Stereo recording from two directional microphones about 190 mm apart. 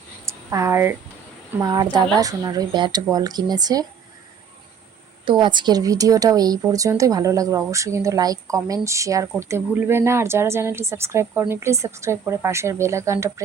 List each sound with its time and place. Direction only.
0.3 s speech: 15° right (ahead or behind)
5.2 s a woman's voice: 25° right (ahead or behind)